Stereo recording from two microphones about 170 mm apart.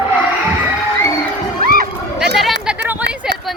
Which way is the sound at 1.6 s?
60° right (ahead or behind).